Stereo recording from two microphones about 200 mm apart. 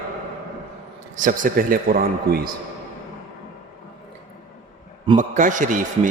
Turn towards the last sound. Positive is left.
turn(degrees=-40)  # may be behind; listen again after turning